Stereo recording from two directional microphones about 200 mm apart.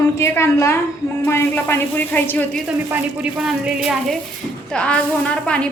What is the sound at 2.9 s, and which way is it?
A woman's voice, 5° right (ahead or behind).